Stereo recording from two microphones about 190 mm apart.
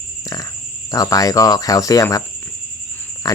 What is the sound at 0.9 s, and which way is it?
Speech, 20° left (ahead or behind).